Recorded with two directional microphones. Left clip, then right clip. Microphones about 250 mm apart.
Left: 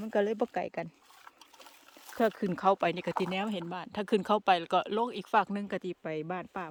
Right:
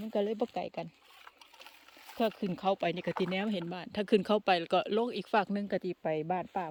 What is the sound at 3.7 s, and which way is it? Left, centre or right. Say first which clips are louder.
Speech: right 3 dB; centre.